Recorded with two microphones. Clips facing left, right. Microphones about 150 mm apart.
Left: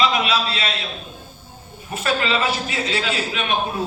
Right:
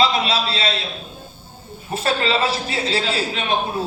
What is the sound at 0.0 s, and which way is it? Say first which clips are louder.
Speech: right 1 dB; 30° right (ahead or behind).